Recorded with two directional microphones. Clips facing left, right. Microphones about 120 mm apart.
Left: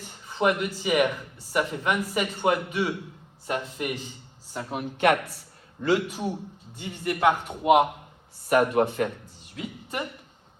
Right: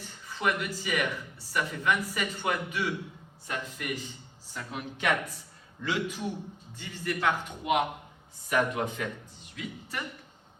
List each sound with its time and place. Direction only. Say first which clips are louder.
0.3 s speech: left 6 dB; 20° left (ahead or behind)
4.5 s speech: left 6 dB; 50° left (ahead or behind)
6.7 s a man's voice: left 5 dB; 20° left (ahead or behind)
7.6 s speech: left 9 dB; 40° left (ahead or behind)
8.4 s speech: left 7 dB; 60° left (ahead or behind)